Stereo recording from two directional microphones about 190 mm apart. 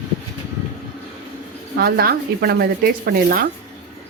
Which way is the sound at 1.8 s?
55° right (ahead or behind).